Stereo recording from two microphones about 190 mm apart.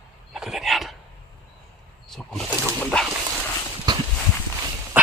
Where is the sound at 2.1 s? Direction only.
5° left (ahead or behind).